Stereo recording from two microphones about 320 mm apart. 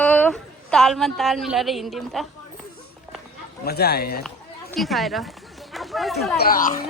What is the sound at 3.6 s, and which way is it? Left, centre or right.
Speech, left.